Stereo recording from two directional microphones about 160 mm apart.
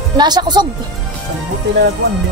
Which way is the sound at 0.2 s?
25° right (ahead or behind).